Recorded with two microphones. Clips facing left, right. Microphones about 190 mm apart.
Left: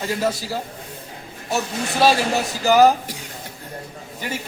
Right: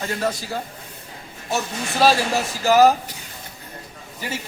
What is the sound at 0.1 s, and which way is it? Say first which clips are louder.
A man's voice: left 3 dB; 5° left (ahead or behind).